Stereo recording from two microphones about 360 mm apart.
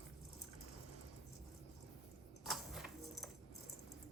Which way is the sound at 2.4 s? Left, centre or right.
Centre.